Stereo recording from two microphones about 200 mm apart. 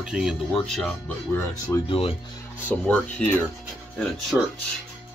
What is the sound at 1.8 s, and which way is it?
Speech, 30° left (ahead or behind).